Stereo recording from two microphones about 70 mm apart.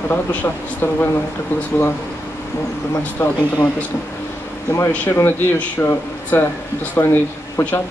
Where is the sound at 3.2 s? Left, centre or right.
Left.